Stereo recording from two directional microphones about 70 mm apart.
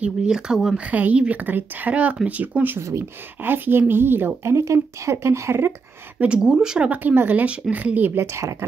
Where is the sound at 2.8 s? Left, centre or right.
Right.